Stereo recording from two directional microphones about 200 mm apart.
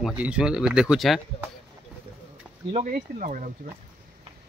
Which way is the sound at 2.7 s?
40° right (ahead or behind).